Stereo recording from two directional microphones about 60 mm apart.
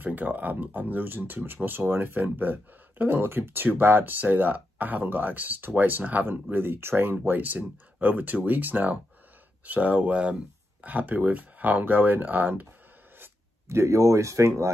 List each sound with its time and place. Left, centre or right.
0.0 s speech: right
13.7 s speech: right